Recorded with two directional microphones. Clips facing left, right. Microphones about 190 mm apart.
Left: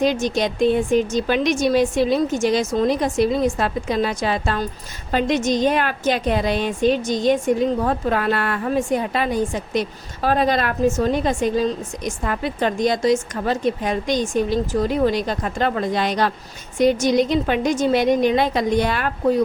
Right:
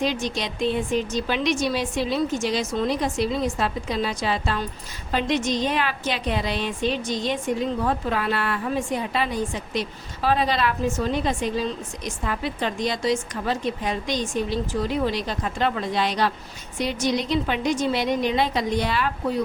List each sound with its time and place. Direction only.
0.0 s a woman's voice: 45° left (ahead or behind)